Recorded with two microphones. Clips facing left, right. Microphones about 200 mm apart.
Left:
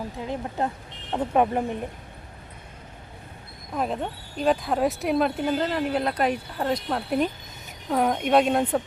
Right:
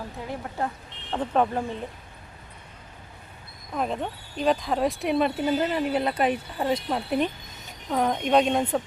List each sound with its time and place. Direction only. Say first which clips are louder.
0.2 s speech: left 2 dB; 20° left (ahead or behind)
3.8 s speech: left 1 dB; centre (ahead or behind)